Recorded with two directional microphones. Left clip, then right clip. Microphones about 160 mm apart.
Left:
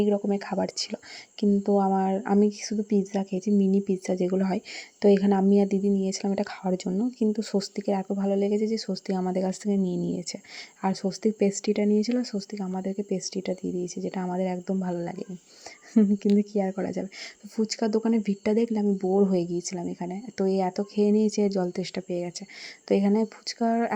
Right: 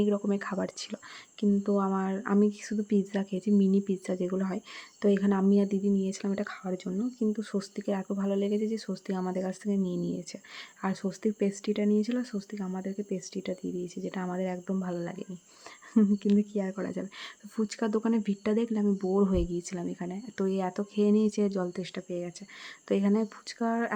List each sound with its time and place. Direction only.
0.0 s speech: 10° left (ahead or behind)